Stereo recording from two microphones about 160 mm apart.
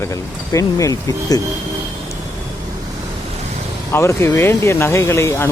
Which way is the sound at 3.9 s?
15° left (ahead or behind).